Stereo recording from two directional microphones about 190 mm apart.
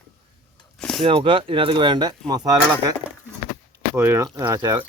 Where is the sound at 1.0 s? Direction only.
30° right (ahead or behind).